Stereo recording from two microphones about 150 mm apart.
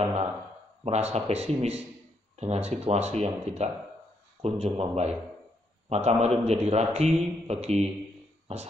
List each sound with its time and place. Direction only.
0.0 s a man's voice: 40° right (ahead or behind)